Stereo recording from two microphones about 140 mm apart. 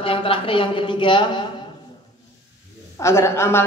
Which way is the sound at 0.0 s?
40° left (ahead or behind).